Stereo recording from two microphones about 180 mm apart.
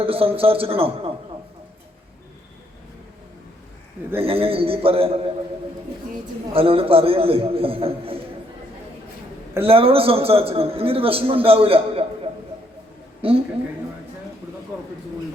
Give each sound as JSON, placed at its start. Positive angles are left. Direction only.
{"t": 0.0, "sound": "a man's voice", "side_deg": -30}
{"t": 4.2, "sound": "a man's voice", "side_deg": -30}
{"t": 6.5, "sound": "a man's voice", "side_deg": -30}
{"t": 9.6, "sound": "a man's voice", "side_deg": -30}